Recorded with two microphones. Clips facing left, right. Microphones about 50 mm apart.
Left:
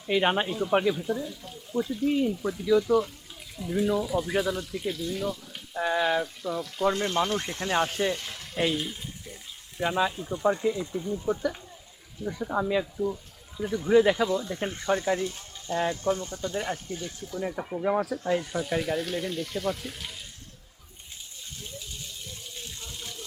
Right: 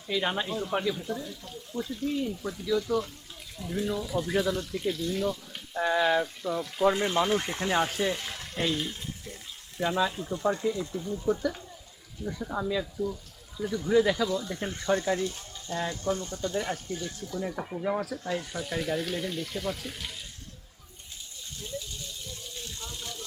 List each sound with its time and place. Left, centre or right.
0.1 s speech: left
0.4 s speech: centre
0.7 s speech: left
0.9 s speech: centre
8.6 s water: centre
10.1 s speech: centre
10.3 s speech: left
17.5 s speech: centre
17.8 s speech: centre
21.6 s water: left